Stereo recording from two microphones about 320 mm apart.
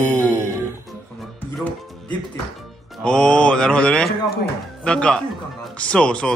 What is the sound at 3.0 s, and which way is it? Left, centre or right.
Speech, centre.